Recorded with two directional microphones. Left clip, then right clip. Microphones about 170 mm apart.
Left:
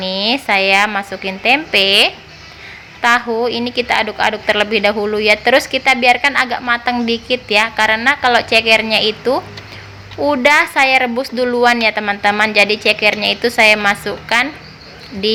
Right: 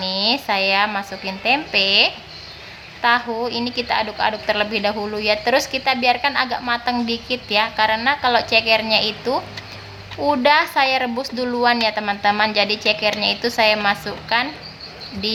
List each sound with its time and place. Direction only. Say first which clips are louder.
0.0 s a woman's voice: left 3 dB; 20° left (ahead or behind)